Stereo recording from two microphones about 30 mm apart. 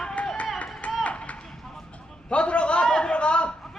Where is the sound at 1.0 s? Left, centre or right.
Left.